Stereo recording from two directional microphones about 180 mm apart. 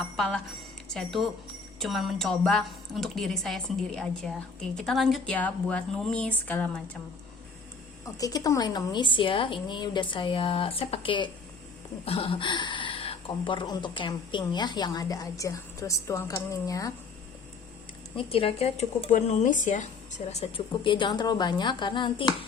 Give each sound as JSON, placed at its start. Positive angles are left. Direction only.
{"t": 0.2, "sound": "a woman's voice", "side_deg": 0}
{"t": 8.2, "sound": "speech", "side_deg": 20}
{"t": 18.2, "sound": "speech", "side_deg": 30}